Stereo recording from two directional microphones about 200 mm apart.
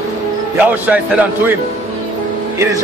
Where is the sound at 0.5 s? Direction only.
10° right (ahead or behind).